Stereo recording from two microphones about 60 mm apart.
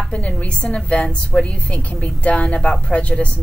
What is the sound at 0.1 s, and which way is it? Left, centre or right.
A woman's voice, left.